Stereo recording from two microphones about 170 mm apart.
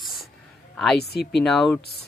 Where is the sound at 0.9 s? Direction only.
70° left (ahead or behind).